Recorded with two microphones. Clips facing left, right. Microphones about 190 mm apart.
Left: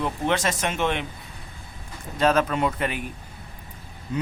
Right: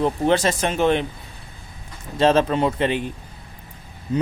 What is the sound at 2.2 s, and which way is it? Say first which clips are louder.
Speech: right 4 dB; 30° right (ahead or behind).